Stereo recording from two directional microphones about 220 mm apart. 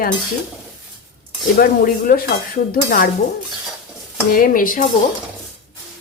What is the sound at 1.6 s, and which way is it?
Speech, 40° left (ahead or behind).